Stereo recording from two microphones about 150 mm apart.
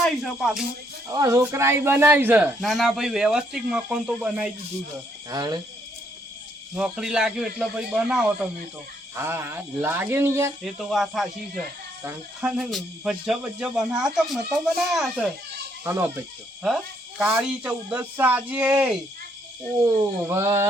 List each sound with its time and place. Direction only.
0.0 s speech: centre (ahead or behind)
1.1 s speech: 25° right (ahead or behind)
2.6 s speech: centre (ahead or behind)
5.3 s speech: 25° right (ahead or behind)
6.7 s speech: 5° right (ahead or behind)
9.1 s speech: 15° right (ahead or behind)
10.6 s speech: centre (ahead or behind)
15.8 s speech: 15° right (ahead or behind)
16.6 s speech: centre (ahead or behind)
20.2 s speech: 20° right (ahead or behind)